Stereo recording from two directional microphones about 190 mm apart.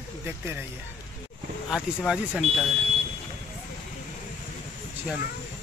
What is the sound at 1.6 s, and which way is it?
Speech, 5° right (ahead or behind).